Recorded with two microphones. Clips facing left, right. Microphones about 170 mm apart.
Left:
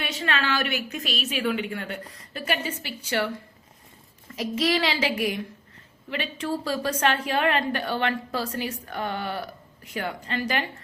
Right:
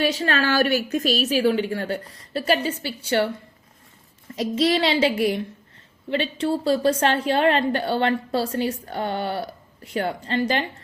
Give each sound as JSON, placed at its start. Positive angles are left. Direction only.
{"t": 0.0, "sound": "a woman's voice", "side_deg": -35}
{"t": 4.4, "sound": "a child's voice", "side_deg": -30}